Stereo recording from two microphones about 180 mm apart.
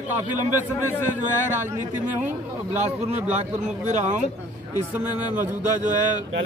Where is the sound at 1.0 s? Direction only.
45° right (ahead or behind).